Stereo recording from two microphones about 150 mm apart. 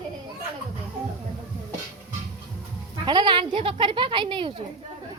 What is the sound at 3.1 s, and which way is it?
Speech, 30° right (ahead or behind).